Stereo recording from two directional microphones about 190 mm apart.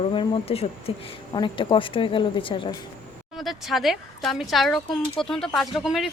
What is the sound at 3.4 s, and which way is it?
Speech, centre (ahead or behind).